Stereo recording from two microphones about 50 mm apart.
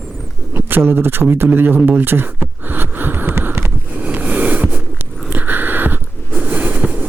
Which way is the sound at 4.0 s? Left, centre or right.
Right.